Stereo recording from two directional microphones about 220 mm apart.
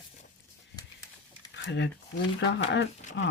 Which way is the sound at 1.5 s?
55° left (ahead or behind).